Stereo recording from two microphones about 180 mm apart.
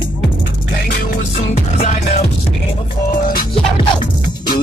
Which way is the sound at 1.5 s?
35° left (ahead or behind).